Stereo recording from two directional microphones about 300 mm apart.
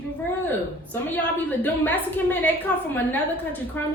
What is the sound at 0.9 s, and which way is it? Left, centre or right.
A woman's voice, centre.